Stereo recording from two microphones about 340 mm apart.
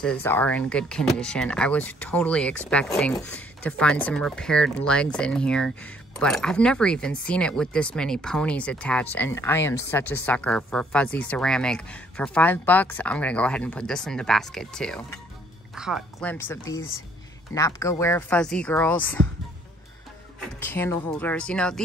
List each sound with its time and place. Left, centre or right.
0.0 s speech: centre
17.6 s speech: centre
20.4 s speech: centre